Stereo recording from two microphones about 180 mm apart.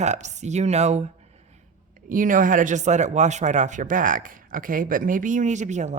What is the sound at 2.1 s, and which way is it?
Speech, 50° right (ahead or behind).